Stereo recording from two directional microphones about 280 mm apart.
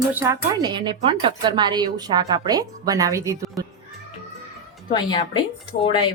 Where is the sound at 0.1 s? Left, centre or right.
Centre.